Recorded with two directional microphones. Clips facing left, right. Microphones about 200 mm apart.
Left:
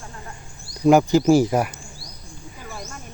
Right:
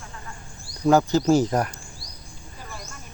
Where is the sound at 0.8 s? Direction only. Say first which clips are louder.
Left 4 dB; 15° left (ahead or behind).